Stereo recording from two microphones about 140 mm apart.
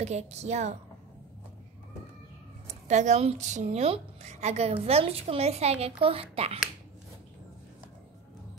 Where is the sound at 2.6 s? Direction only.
55° right (ahead or behind).